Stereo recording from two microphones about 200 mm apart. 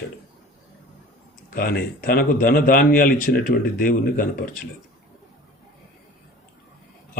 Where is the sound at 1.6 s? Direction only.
50° left (ahead or behind).